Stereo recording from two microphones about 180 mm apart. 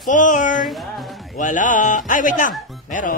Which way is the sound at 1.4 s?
45° left (ahead or behind).